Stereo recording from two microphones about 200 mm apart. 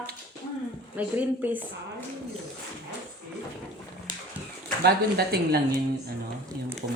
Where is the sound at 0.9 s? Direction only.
10° right (ahead or behind).